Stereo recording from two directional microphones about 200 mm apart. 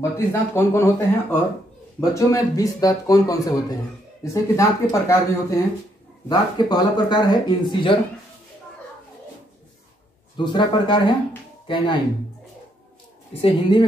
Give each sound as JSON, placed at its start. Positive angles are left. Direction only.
{"t": 0.0, "sound": "speech", "side_deg": 15}
{"t": 10.3, "sound": "speech", "side_deg": 20}
{"t": 13.3, "sound": "speech", "side_deg": 30}